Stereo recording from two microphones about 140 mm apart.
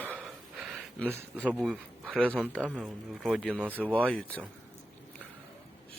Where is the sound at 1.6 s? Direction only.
5° right (ahead or behind).